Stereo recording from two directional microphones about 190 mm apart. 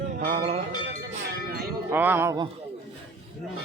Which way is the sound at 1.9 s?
10° right (ahead or behind).